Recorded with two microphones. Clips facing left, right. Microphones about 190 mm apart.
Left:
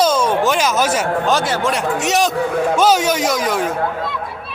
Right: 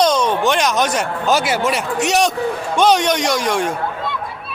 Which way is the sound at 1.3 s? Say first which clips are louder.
Right 5 dB; 10° right (ahead or behind).